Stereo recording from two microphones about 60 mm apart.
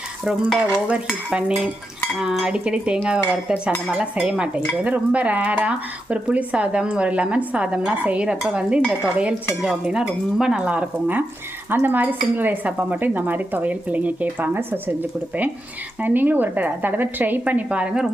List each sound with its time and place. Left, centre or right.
0.3 s stir: centre
1.3 s speech: centre
9.8 s speech: centre
10.6 s speech: right
11.7 s speech: right
16.0 s speech: right